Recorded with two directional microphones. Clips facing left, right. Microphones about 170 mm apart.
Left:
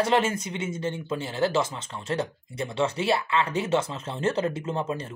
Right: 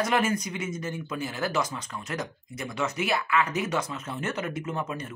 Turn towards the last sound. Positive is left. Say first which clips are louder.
# left 3 dB
turn(degrees=30)  # may be behind; listen again after turning